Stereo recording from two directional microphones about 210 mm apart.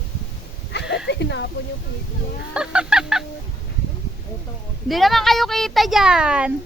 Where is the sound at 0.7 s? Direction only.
55° left (ahead or behind).